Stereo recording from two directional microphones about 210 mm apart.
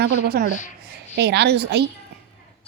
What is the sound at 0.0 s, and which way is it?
A woman's voice, 50° right (ahead or behind).